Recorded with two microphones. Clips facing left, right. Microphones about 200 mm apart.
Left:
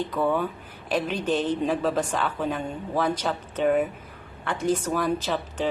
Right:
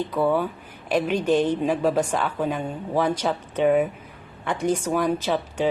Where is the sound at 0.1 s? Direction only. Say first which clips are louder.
Right 3 dB; 10° right (ahead or behind).